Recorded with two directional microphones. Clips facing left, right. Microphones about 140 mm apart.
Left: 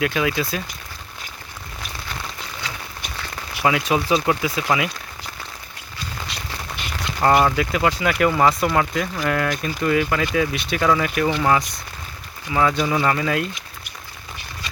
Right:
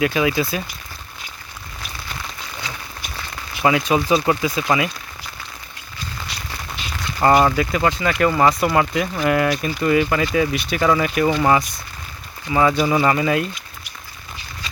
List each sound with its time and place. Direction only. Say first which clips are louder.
0.0 s speech: right 3 dB; 5° right (ahead or behind)
3.6 s speech: right 2 dB; centre (ahead or behind)
7.2 s speech: right 2 dB; 5° right (ahead or behind)
11.3 s speech: right 2 dB; 20° right (ahead or behind)
12.5 s speech: right 3 dB; 10° right (ahead or behind)